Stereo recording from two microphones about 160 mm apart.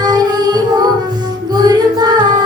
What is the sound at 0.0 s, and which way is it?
Music, 25° right (ahead or behind).